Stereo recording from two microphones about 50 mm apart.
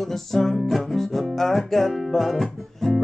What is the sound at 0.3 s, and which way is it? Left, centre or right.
Music, centre.